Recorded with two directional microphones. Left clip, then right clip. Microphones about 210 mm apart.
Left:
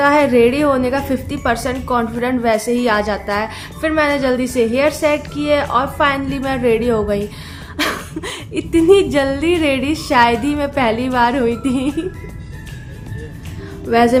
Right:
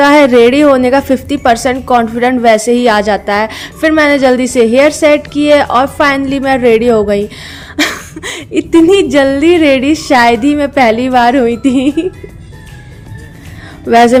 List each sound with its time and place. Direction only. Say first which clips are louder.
0.0 s a woman's voice: right 7 dB; 35° right (ahead or behind)
13.8 s a woman's voice: right 7 dB; 35° right (ahead or behind)